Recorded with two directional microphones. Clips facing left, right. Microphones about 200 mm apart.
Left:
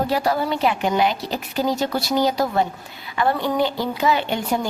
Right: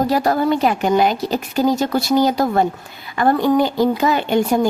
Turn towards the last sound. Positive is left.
turn(degrees=-45)  # may be behind; listen again after turning